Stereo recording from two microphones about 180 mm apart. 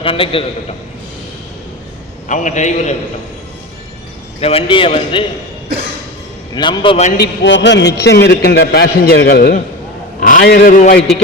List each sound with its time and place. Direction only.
0.0 s a man's voice: 30° left (ahead or behind)
2.2 s a man's voice: 45° left (ahead or behind)
4.4 s a man's voice: 35° left (ahead or behind)
6.5 s a man's voice: 25° left (ahead or behind)
7.2 s a man's voice: 80° left; by 10.4 s 45° left (ahead or behind)
10.4 s a man's voice: 55° left (ahead or behind)